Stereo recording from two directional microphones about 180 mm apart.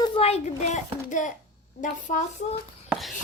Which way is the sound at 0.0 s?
30° left (ahead or behind).